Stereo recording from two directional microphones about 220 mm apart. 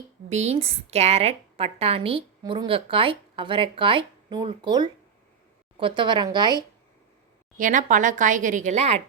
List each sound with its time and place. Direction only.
0.3 s a woman's voice: 30° right (ahead or behind)
7.6 s a woman's voice: 35° right (ahead or behind)